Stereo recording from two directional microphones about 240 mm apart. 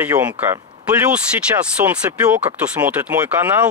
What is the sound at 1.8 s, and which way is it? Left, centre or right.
Speech, centre.